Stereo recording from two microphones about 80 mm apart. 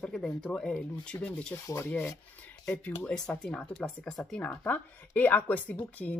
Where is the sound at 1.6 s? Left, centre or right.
Left.